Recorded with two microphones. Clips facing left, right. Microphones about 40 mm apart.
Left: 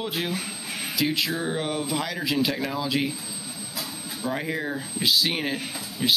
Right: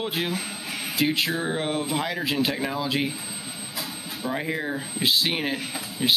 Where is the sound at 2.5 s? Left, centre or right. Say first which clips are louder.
Right 1 dB; centre.